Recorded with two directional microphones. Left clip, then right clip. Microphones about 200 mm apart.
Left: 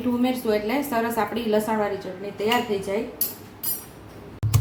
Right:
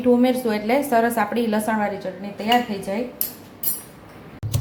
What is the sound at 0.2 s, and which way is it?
A woman's voice, 20° right (ahead or behind).